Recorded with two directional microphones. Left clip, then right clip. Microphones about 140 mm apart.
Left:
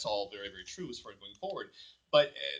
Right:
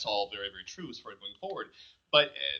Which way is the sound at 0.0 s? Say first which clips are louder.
Right 3 dB; 55° left (ahead or behind).